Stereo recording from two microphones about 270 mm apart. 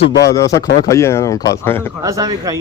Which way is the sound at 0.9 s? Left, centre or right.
Centre.